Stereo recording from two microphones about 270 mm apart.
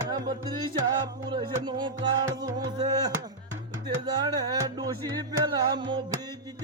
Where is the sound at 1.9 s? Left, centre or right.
Right.